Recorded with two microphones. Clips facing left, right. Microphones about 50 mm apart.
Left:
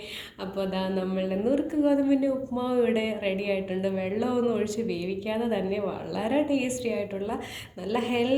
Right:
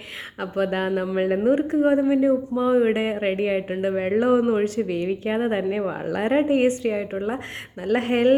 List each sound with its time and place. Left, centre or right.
0.5 s speech: right